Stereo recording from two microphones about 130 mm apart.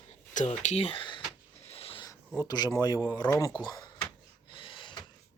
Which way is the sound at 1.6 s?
50° left (ahead or behind).